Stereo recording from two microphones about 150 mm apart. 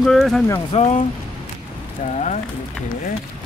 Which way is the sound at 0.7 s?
50° left (ahead or behind).